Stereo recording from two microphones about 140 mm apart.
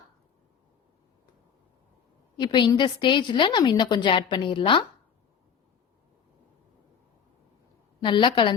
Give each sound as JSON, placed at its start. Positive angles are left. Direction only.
{"t": 2.4, "sound": "a woman's voice", "side_deg": 30}
{"t": 8.0, "sound": "a woman's voice", "side_deg": 35}